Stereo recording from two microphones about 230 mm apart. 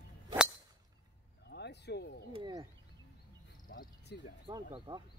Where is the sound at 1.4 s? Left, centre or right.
Left.